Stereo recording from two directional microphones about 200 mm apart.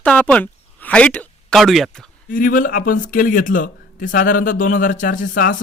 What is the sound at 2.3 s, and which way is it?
Speech, 45° left (ahead or behind).